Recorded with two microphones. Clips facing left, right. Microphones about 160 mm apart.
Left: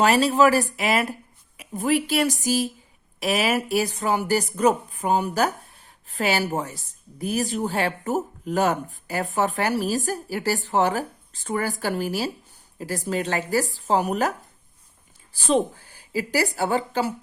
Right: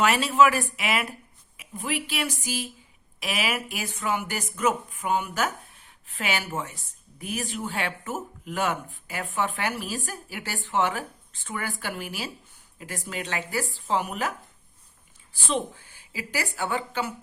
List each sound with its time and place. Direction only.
0.0 s a woman's voice: 35° left (ahead or behind)